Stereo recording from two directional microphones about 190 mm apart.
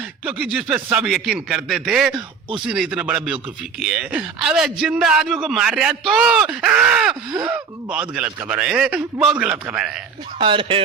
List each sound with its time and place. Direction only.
0.3 s a man's voice: 5° right (ahead or behind)
10.3 s speech: 25° right (ahead or behind)